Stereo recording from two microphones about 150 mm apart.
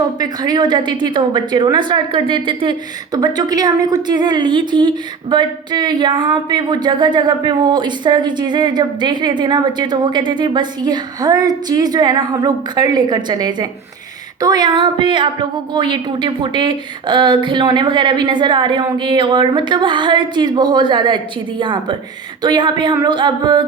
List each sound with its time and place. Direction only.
0.2 s a woman's voice: 25° right (ahead or behind)